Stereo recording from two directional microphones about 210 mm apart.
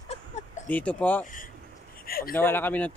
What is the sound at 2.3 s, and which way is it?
Speech, 10° left (ahead or behind).